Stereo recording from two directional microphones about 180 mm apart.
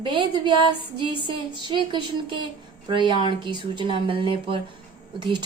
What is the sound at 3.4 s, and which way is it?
Speech, 25° right (ahead or behind).